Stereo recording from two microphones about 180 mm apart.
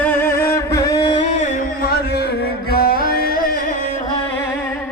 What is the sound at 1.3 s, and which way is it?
Music, 40° left (ahead or behind).